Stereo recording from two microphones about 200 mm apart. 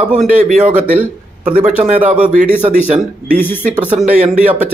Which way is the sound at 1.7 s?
35° right (ahead or behind).